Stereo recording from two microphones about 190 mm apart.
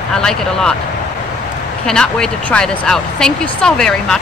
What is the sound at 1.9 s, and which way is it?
Speech, 5° left (ahead or behind).